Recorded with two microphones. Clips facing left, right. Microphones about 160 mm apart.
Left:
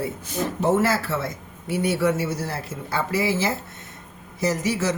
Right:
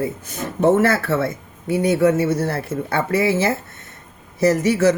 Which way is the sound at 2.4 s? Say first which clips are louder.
Right 8 dB; 60° right (ahead or behind).